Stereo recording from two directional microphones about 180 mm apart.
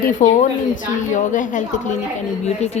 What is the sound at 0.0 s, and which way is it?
Speech, 45° left (ahead or behind).